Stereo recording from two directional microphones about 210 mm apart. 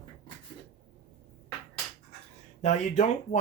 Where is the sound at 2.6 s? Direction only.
35° left (ahead or behind).